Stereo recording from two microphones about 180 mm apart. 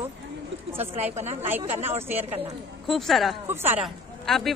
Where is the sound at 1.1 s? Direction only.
35° right (ahead or behind).